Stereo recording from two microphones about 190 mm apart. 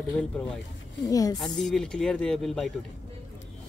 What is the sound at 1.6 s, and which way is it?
Speech, 5° left (ahead or behind).